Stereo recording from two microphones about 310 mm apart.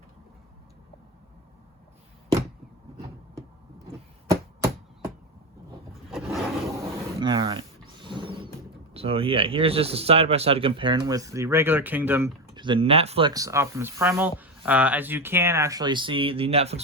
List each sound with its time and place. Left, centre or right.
4.3 s chop: centre
6.1 s roar: centre
7.2 s speech: centre
8.0 s a sound: centre
8.9 s speech: centre